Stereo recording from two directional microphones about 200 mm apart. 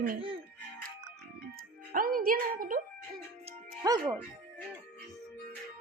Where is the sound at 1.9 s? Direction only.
45° right (ahead or behind).